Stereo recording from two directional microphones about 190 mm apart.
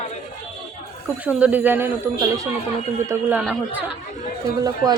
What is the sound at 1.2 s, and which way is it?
Speech, 10° right (ahead or behind).